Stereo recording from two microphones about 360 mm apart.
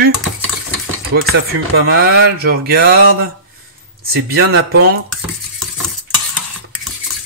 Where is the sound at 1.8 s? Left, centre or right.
Right.